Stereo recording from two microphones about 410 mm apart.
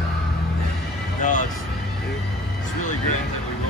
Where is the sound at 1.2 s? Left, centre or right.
Centre.